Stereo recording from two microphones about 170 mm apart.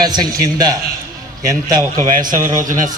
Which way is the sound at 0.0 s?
25° right (ahead or behind).